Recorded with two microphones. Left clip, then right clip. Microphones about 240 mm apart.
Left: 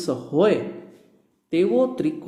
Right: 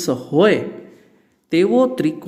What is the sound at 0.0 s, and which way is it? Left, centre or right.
Speech, right.